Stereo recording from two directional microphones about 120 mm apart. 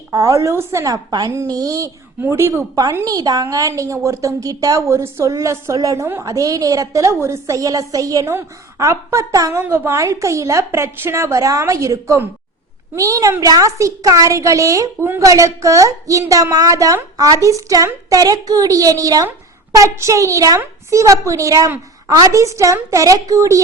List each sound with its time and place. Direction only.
0.1 s a woman's voice: 25° right (ahead or behind)
1.1 s a woman's voice: 35° right (ahead or behind)